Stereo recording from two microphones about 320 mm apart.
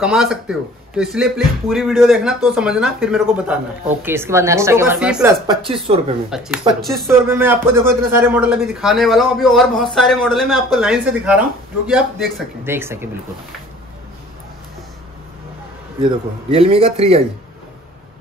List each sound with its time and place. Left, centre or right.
0.0 s a woman's voice: centre
16.0 s a woman's voice: centre